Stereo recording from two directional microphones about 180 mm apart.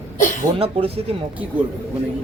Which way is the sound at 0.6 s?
35° right (ahead or behind).